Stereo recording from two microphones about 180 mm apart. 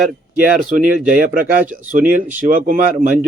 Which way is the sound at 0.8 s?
50° right (ahead or behind).